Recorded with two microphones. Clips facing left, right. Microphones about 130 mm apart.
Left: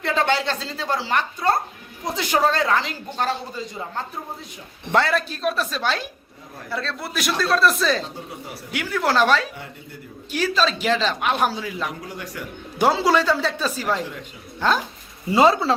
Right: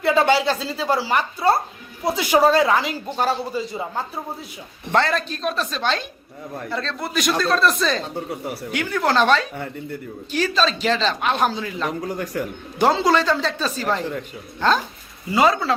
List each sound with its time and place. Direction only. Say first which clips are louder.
0.0 s speech: right 4 dB; 5° right (ahead or behind)
4.9 s speech: even; 5° left (ahead or behind)
12.0 s speech: right 8 dB; 45° right (ahead or behind)
12.8 s speech: right 1 dB; 10° left (ahead or behind)
15.3 s speech: left 2 dB; 25° left (ahead or behind)